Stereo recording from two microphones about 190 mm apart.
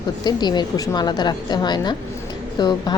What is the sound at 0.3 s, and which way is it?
Speech, 20° left (ahead or behind).